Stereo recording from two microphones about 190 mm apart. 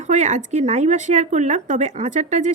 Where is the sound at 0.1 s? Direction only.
40° right (ahead or behind).